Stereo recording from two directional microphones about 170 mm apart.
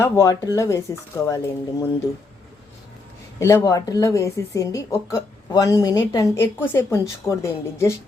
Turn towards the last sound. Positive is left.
turn(degrees=15)  # may be behind; listen again after turning